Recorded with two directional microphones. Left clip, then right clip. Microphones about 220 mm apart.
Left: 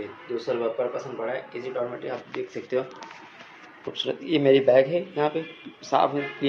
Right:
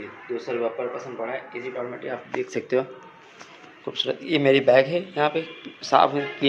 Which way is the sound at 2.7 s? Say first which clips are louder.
Right 3 dB; 25° right (ahead or behind).